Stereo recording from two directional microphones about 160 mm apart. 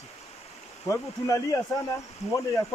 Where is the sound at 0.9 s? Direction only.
20° left (ahead or behind).